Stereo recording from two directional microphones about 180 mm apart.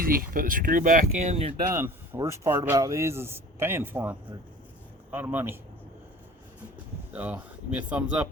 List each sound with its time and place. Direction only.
0.0 s speech: 50° right (ahead or behind)
1.7 s speech: 15° right (ahead or behind)
7.1 s speech: 10° right (ahead or behind)